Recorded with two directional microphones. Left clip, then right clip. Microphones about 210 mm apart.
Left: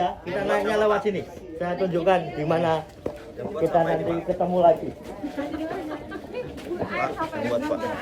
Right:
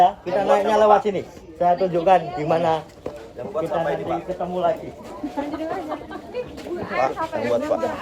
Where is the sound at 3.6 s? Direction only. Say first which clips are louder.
Left 1 dB; centre (ahead or behind).